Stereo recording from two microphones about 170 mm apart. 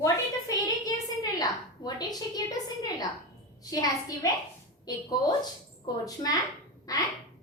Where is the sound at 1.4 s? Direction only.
25° left (ahead or behind).